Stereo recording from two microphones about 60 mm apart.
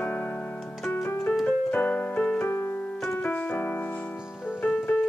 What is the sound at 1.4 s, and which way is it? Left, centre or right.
Music, left.